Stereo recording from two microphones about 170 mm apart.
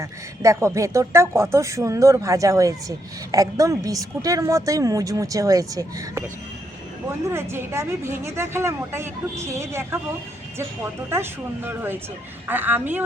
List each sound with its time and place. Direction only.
0.0 s a woman's voice: 15° right (ahead or behind)
7.3 s speech: 15° right (ahead or behind)
11.1 s speech: 10° right (ahead or behind)